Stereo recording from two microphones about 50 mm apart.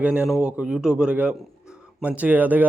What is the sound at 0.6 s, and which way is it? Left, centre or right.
Speech, centre.